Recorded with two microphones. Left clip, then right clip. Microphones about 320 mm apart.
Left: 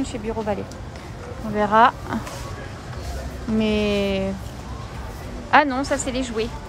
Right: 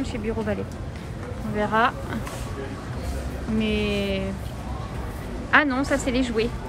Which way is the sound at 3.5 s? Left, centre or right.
Centre.